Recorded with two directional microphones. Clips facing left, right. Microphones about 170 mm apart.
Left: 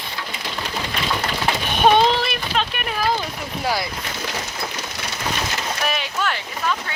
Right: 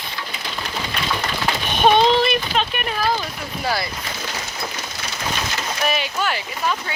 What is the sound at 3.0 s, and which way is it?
Speech, 15° left (ahead or behind).